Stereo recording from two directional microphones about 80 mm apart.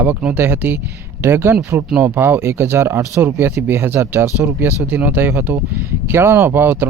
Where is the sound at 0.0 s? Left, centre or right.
Centre.